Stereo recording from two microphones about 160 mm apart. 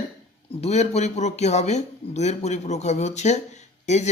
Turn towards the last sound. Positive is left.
turn(degrees=45)  # may be behind; listen again after turning